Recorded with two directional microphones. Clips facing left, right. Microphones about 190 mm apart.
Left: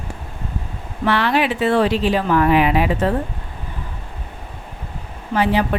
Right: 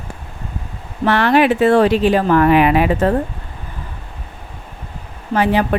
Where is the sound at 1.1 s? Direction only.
50° right (ahead or behind).